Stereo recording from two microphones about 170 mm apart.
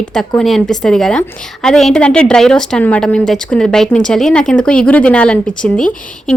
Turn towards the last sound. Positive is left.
turn(degrees=5)  # may be behind; listen again after turning